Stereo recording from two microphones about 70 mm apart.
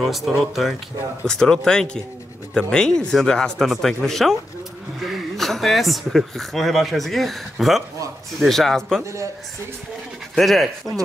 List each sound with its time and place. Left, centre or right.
0.0 s a man's voice: centre
9.0 s a man's voice: right
10.3 s a man's voice: centre